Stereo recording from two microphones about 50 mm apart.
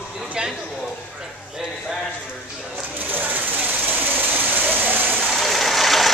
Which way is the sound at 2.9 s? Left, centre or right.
Right.